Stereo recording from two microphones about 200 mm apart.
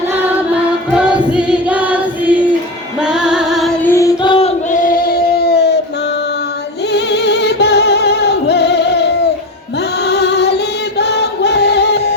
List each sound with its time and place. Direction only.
0.1 s choir: 5° right (ahead or behind)
3.0 s music: 5° right (ahead or behind)
3.9 s a sound: 20° left (ahead or behind); by 5.8 s 55° left (ahead or behind)
6.9 s music: 55° left (ahead or behind)